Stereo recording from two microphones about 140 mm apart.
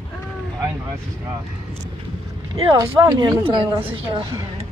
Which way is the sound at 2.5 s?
35° right (ahead or behind).